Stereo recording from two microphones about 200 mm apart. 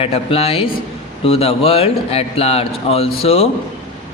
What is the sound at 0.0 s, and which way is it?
A man's voice, 30° left (ahead or behind).